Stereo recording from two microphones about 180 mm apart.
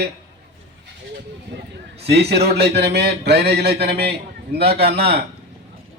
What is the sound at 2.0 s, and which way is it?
A man's voice, 65° right (ahead or behind).